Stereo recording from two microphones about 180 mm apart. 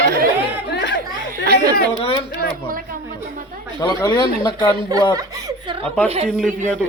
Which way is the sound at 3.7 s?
20° left (ahead or behind).